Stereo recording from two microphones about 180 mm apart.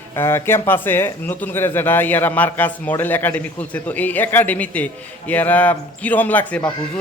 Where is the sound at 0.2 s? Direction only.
15° left (ahead or behind).